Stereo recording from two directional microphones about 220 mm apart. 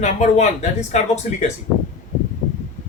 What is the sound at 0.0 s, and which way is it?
Speech, 30° left (ahead or behind).